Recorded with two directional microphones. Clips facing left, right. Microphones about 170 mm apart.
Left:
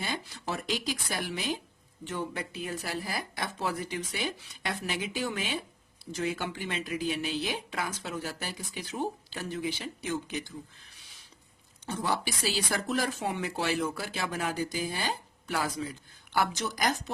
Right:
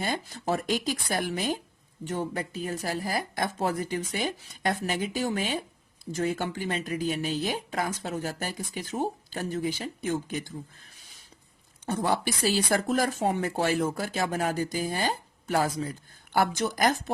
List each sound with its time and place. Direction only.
0.0 s speech: 45° right (ahead or behind)
10.9 s rodents: 45° right (ahead or behind)
11.9 s speech: 50° right (ahead or behind)